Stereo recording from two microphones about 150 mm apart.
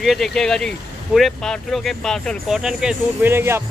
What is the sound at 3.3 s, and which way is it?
Speech, 15° right (ahead or behind).